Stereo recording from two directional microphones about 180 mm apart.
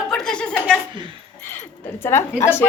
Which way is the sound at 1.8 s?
15° left (ahead or behind).